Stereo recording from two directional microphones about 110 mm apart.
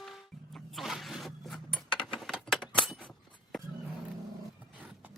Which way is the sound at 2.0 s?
Centre (ahead or behind).